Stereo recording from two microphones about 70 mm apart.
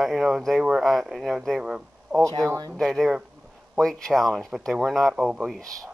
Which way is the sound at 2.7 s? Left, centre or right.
Centre.